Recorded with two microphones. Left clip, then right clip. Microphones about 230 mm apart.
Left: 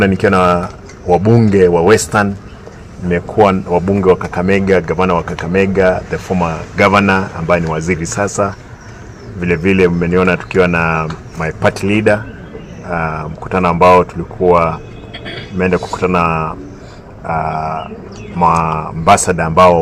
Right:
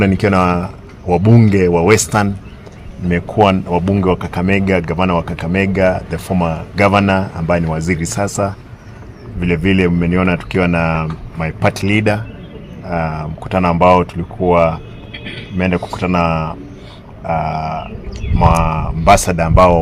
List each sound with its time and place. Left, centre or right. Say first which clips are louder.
0.0 s speech: left 3 dB; right